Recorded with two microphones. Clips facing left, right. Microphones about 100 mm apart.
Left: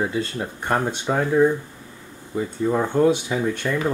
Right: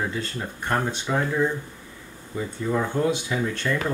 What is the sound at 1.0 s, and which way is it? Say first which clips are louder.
Speech: left 8 dB; 25° left (ahead or behind).